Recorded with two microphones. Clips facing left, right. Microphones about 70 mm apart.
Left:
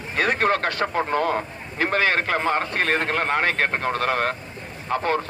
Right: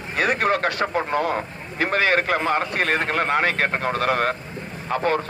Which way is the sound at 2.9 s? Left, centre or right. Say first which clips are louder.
Even; right.